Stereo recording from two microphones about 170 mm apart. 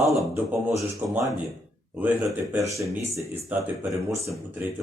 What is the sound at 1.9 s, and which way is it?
Speech, 5° right (ahead or behind).